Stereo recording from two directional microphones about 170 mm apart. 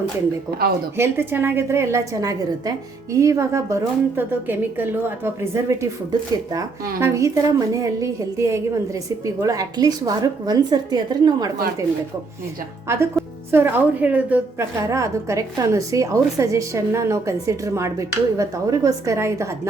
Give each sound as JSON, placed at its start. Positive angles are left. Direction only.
{"t": 0.9, "sound": "a woman's voice", "side_deg": -15}
{"t": 7.0, "sound": "a woman's voice", "side_deg": -20}
{"t": 13.2, "sound": "music", "side_deg": 0}
{"t": 13.5, "sound": "a woman's voice", "side_deg": -15}